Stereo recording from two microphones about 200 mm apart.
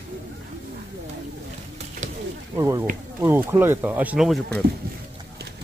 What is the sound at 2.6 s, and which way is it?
Speech, 15° right (ahead or behind).